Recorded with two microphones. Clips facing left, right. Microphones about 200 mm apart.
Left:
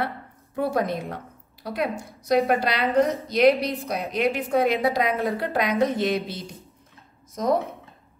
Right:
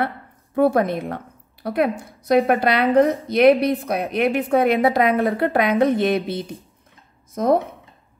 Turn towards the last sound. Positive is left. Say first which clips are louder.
# right 5 dB
turn(degrees=-55)  # may be behind; listen again after turning